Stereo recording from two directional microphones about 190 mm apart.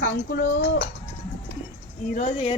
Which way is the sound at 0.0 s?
55° left (ahead or behind).